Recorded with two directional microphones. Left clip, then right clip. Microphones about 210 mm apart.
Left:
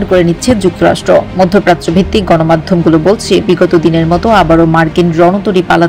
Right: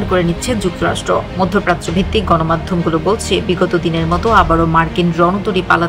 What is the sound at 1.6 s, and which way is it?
A woman's voice, 20° left (ahead or behind).